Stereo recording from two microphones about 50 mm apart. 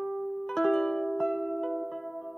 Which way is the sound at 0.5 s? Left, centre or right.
Centre.